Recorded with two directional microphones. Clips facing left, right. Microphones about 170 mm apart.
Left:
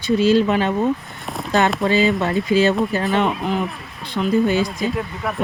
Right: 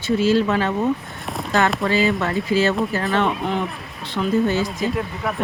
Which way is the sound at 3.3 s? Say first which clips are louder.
Left 1 dB; centre (ahead or behind).